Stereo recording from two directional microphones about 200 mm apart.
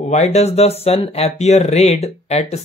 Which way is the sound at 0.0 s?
35° left (ahead or behind).